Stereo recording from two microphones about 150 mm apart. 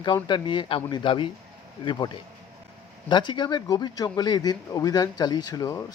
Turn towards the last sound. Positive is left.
turn(degrees=20)  # may be behind; listen again after turning